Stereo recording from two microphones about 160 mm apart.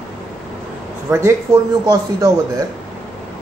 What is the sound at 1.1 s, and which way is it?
Speech, 20° right (ahead or behind).